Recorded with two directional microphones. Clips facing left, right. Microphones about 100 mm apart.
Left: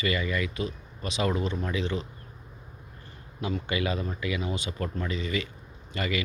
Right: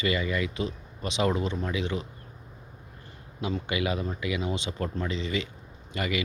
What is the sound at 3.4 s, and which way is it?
Speech, 15° right (ahead or behind).